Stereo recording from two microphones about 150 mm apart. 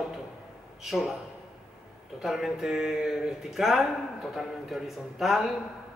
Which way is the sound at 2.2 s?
Centre (ahead or behind).